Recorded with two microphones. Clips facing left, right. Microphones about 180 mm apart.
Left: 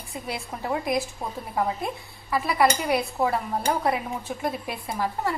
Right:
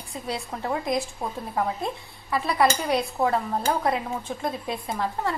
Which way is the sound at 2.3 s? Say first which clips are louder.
Even; 5° left (ahead or behind).